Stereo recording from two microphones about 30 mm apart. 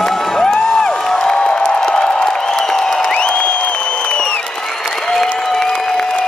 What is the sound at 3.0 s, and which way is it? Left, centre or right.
Music, left.